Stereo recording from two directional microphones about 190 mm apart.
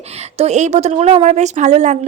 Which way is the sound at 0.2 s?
35° right (ahead or behind).